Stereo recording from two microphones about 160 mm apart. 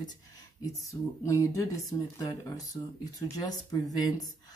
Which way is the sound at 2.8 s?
30° left (ahead or behind).